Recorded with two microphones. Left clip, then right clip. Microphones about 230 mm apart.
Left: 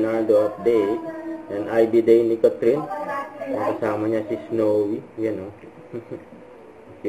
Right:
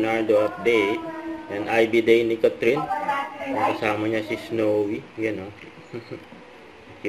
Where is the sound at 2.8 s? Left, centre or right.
Right.